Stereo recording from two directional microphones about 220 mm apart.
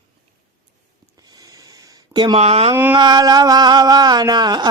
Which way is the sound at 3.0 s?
15° right (ahead or behind).